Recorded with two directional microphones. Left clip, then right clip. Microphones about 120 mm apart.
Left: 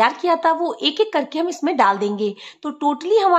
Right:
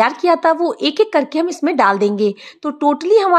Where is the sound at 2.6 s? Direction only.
35° right (ahead or behind).